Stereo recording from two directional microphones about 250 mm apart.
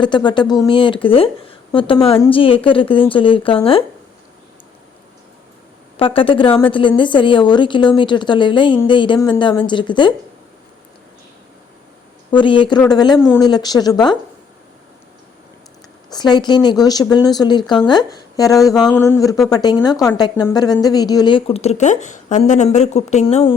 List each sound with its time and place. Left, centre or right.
0.0 s a woman's voice: centre
6.0 s a woman's voice: left
12.3 s a woman's voice: centre
16.1 s a woman's voice: centre